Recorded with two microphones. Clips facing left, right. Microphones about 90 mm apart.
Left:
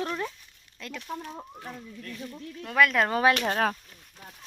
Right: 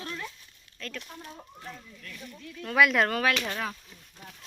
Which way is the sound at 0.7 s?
15° left (ahead or behind).